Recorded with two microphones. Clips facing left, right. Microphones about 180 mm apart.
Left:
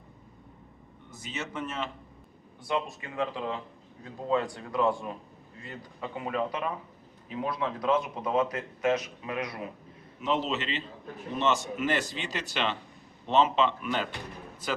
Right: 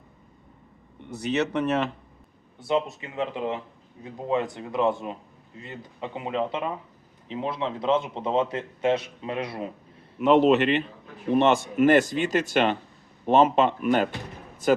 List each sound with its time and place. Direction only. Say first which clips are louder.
1.1 s speech: right 12 dB; 70° right (ahead or behind)
2.6 s speech: right 6 dB; 25° right (ahead or behind)
10.2 s a man's voice: right 12 dB; 65° right (ahead or behind)